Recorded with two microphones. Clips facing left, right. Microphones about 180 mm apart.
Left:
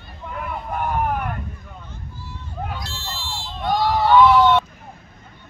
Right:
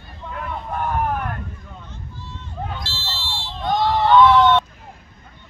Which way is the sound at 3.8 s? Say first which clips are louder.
Even; 10° left (ahead or behind).